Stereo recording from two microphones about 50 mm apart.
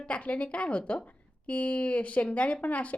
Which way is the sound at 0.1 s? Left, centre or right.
Left.